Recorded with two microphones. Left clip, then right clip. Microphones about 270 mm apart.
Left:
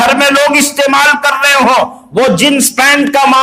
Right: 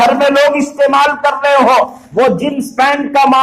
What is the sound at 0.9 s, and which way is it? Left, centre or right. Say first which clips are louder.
A man's voice: left 5 dB; left.